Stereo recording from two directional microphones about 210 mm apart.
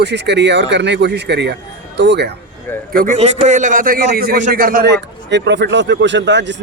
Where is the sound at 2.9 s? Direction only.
35° right (ahead or behind); by 6.5 s 60° right (ahead or behind).